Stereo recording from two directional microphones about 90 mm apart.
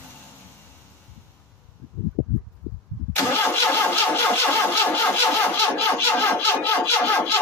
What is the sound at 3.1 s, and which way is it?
Vehicle, 25° left (ahead or behind).